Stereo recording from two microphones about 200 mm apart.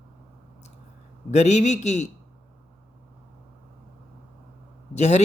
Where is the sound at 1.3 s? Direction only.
35° left (ahead or behind).